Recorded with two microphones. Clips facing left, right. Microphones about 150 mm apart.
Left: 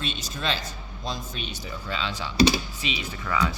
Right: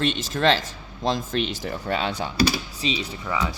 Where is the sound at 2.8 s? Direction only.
35° right (ahead or behind).